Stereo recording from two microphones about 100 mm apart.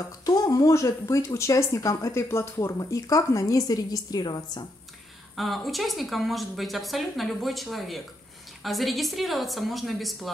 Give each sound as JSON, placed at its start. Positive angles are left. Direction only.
{"t": 0.2, "sound": "speech", "side_deg": 40}
{"t": 5.3, "sound": "a woman's voice", "side_deg": 0}